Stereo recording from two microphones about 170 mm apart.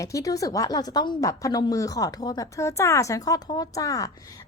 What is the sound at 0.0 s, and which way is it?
A woman's voice, 20° left (ahead or behind).